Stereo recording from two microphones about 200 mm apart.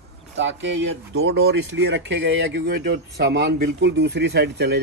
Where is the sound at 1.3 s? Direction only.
60° right (ahead or behind).